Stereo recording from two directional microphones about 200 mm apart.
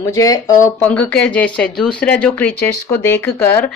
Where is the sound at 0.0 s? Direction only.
15° left (ahead or behind).